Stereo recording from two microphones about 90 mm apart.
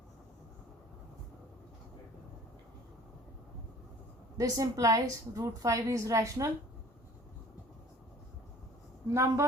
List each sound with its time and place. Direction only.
4.4 s a woman's voice: 40° right (ahead or behind)
9.0 s a woman's voice: 35° right (ahead or behind)